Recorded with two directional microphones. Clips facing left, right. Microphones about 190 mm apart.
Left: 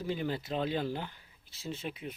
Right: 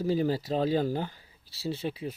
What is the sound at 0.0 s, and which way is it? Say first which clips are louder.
Speech: right 7 dB; 35° right (ahead or behind).